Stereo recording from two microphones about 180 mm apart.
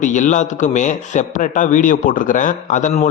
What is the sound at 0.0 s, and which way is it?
A man's voice, 45° left (ahead or behind).